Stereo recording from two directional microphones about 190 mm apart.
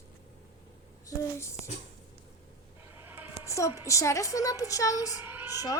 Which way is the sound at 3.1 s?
10° right (ahead or behind).